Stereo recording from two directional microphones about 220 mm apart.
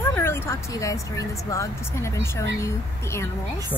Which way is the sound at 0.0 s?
10° left (ahead or behind).